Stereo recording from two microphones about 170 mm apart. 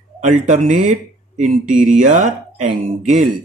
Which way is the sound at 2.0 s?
50° right (ahead or behind).